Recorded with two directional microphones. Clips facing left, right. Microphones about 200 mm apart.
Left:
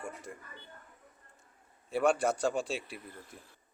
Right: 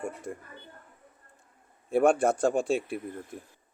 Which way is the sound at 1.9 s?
50° right (ahead or behind).